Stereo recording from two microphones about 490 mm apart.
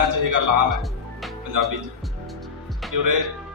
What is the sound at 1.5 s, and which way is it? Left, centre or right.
Speech, right.